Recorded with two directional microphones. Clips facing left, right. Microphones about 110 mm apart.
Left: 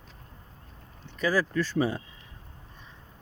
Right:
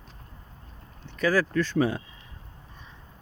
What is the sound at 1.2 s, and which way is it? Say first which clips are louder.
Speech: right 2 dB; centre (ahead or behind).